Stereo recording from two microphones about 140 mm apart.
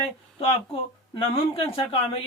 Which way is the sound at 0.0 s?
45° left (ahead or behind).